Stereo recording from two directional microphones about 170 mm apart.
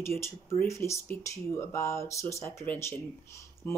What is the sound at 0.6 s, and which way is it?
Speech, 15° left (ahead or behind).